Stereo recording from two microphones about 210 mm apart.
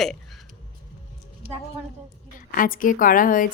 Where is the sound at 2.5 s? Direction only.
40° left (ahead or behind).